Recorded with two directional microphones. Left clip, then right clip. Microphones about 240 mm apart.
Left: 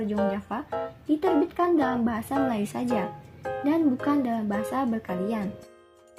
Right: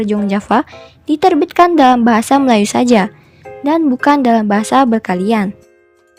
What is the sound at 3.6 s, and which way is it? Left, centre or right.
A woman's voice, right.